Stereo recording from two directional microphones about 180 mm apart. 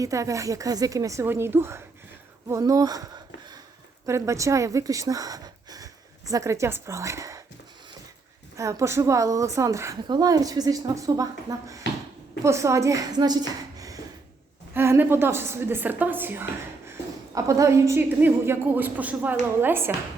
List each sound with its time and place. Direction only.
0.0 s a woman's voice: 20° right (ahead or behind)
8.5 s a woman's voice: 15° right (ahead or behind)
13.7 s a sound: 20° right (ahead or behind)
14.7 s a woman's voice: 10° right (ahead or behind)